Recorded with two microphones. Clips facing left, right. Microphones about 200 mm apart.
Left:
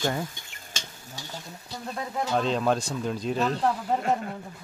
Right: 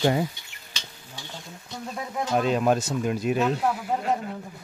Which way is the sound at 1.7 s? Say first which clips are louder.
Even; 5° right (ahead or behind).